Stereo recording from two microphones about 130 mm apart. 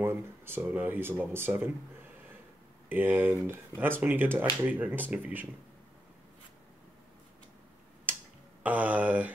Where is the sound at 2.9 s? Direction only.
15° right (ahead or behind).